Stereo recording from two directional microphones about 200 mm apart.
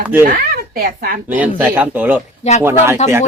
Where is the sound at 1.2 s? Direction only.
10° right (ahead or behind).